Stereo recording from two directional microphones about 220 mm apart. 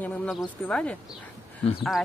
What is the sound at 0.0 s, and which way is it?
Speech, centre (ahead or behind).